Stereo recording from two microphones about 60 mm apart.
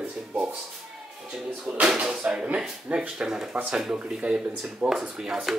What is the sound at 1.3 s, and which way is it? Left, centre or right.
Speech, centre.